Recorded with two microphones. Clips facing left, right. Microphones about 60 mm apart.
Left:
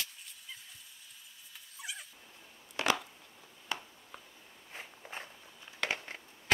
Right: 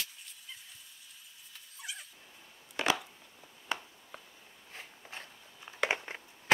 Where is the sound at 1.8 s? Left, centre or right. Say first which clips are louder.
Left 1 dB; centre.